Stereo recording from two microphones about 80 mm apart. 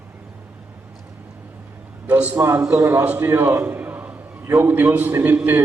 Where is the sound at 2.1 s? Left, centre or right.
Right.